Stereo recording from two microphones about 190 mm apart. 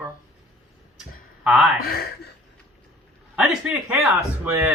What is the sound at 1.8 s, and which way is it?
Speech, 55° left (ahead or behind).